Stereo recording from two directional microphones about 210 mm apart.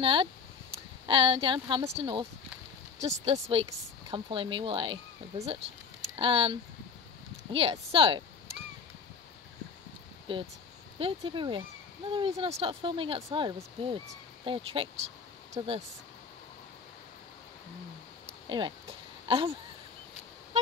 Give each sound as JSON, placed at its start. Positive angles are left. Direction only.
{"t": 0.0, "sound": "speech", "side_deg": -25}
{"t": 3.3, "sound": "speech", "side_deg": -25}
{"t": 10.3, "sound": "speech", "side_deg": -25}
{"t": 19.2, "sound": "a sound", "side_deg": -25}